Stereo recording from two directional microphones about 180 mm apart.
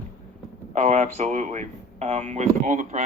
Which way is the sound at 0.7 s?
40° right (ahead or behind).